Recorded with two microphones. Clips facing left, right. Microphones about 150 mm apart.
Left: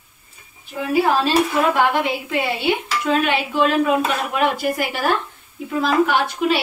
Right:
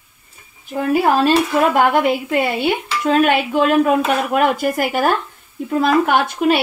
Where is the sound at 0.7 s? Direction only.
50° right (ahead or behind).